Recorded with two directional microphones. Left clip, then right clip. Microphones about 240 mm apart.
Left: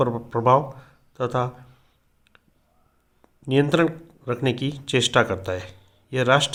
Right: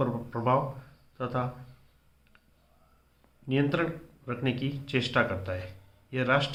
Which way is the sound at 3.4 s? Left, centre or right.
Left.